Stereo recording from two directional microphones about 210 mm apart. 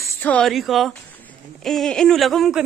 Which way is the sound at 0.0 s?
5° left (ahead or behind).